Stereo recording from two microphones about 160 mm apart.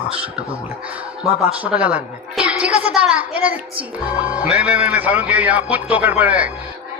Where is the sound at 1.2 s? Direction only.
5° right (ahead or behind).